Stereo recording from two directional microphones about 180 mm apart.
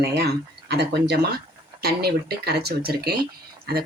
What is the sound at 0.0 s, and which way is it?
Speech, 65° right (ahead or behind).